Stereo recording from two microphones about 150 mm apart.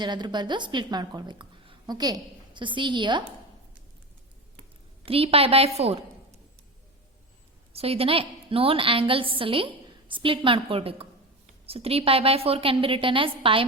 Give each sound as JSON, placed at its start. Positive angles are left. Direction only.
{"t": 0.0, "sound": "a woman's voice", "side_deg": -30}
{"t": 5.0, "sound": "a woman's voice", "side_deg": -40}
{"t": 7.7, "sound": "a woman's voice", "side_deg": -40}